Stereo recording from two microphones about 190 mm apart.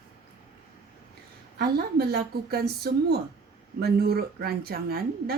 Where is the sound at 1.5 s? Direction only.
55° right (ahead or behind).